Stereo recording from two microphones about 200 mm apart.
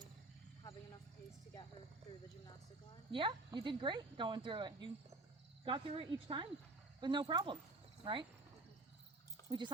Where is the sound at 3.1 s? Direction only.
25° right (ahead or behind).